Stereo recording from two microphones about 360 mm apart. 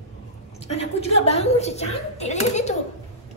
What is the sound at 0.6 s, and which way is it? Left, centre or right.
A woman's voice, centre.